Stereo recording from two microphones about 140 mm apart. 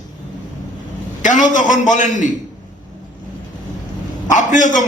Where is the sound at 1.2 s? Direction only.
60° left (ahead or behind).